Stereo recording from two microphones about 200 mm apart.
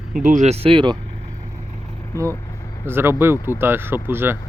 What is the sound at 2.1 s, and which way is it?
Speech, 15° right (ahead or behind).